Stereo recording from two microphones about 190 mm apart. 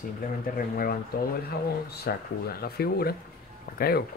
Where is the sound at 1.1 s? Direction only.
50° left (ahead or behind).